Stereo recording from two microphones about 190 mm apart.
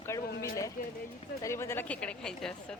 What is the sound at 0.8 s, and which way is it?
Speech, 45° left (ahead or behind).